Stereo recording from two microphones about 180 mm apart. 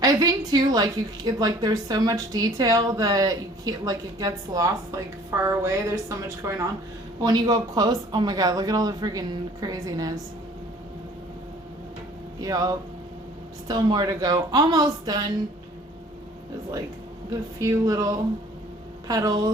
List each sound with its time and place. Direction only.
0.0 s a woman's voice: 20° right (ahead or behind)
12.4 s a woman's voice: 20° right (ahead or behind)
17.6 s a woman's voice: 20° right (ahead or behind)